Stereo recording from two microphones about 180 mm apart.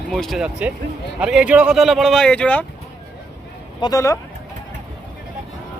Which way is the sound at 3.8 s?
20° left (ahead or behind).